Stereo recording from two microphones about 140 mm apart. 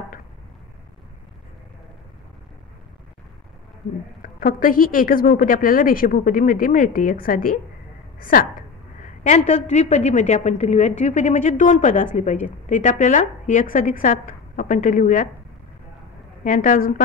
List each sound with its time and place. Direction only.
4.2 s a woman's voice: 90° left
9.2 s a woman's voice: 60° left (ahead or behind)
16.4 s a woman's voice: 70° left (ahead or behind)